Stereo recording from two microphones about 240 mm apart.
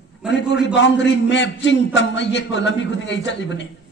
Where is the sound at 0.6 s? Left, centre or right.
Left.